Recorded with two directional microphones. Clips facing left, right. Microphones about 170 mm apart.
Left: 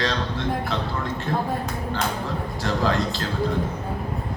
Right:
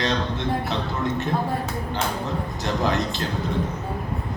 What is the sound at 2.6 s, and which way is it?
Speech, 20° right (ahead or behind).